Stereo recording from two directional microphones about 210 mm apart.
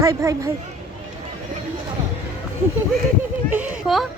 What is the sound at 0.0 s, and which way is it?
Speech, 15° right (ahead or behind).